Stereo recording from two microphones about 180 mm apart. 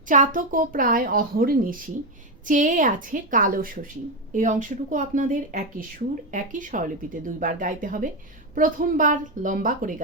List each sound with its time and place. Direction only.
0.1 s speech: 45° right (ahead or behind)